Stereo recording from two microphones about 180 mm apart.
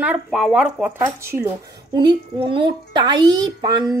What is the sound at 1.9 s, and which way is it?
Speech, 25° right (ahead or behind).